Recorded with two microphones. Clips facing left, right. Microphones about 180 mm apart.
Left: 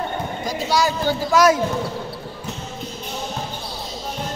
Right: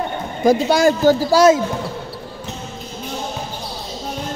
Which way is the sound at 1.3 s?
25° right (ahead or behind).